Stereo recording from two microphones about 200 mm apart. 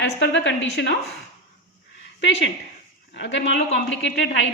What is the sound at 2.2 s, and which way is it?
A woman's voice, 70° left (ahead or behind).